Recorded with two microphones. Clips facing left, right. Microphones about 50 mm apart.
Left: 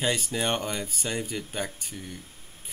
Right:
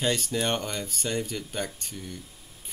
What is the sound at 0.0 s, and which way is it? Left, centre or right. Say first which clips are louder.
Speech: even; centre.